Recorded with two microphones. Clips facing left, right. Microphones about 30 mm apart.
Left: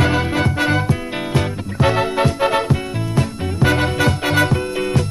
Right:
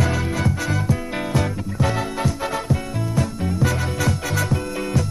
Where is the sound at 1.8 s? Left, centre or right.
Left.